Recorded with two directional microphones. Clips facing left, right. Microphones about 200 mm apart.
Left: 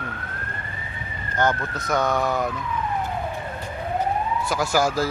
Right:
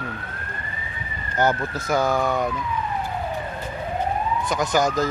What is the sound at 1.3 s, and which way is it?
Speech, 10° right (ahead or behind).